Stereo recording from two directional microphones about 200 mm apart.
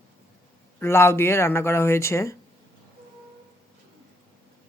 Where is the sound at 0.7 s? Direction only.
10° left (ahead or behind).